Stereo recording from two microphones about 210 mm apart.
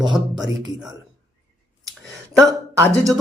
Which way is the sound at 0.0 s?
Centre (ahead or behind).